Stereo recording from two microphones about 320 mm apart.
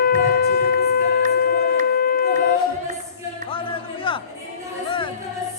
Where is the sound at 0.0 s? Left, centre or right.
Left.